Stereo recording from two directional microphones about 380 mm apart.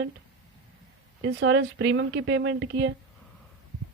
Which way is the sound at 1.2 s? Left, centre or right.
Right.